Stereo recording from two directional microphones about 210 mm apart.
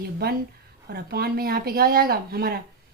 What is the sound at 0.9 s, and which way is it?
Speech, 50° right (ahead or behind).